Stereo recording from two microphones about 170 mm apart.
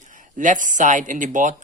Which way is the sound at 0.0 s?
50° right (ahead or behind).